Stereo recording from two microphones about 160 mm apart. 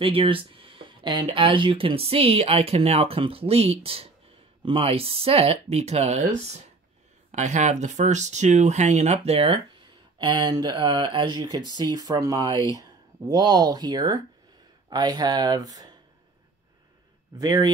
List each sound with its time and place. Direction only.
0.0 s speech: 35° right (ahead or behind)
7.2 s speech: 50° right (ahead or behind); by 15.9 s 25° right (ahead or behind)
17.4 s speech: 25° right (ahead or behind)